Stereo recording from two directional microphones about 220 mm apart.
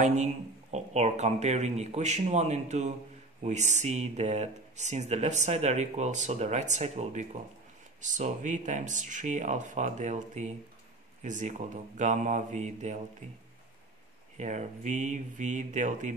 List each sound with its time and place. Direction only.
0.0 s speech: 30° right (ahead or behind)
14.3 s speech: 35° right (ahead or behind)